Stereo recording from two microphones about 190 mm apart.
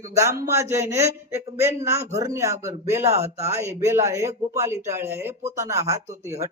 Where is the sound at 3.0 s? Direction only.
35° right (ahead or behind).